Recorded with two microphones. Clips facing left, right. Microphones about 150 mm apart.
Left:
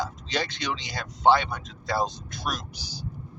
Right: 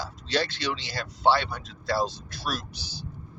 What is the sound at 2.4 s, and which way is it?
Speech, 20° left (ahead or behind).